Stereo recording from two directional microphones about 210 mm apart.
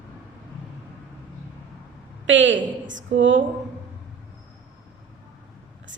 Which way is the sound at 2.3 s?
60° right (ahead or behind).